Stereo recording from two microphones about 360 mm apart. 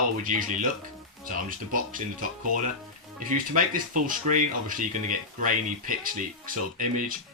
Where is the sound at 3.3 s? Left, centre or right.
Right.